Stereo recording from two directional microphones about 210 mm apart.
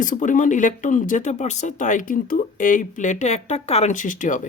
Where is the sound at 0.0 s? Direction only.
40° left (ahead or behind).